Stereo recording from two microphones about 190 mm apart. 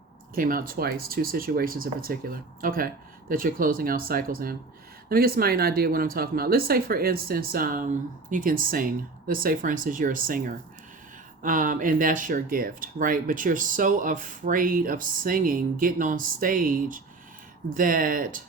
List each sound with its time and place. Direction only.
0.3 s speech: 50° right (ahead or behind)